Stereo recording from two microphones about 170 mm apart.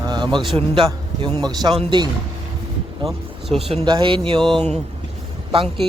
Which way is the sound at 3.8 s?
30° right (ahead or behind).